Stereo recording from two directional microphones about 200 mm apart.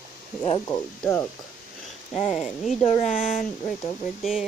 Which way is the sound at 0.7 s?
10° left (ahead or behind).